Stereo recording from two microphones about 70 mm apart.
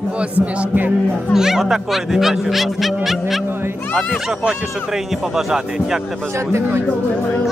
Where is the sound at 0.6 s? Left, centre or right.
Right.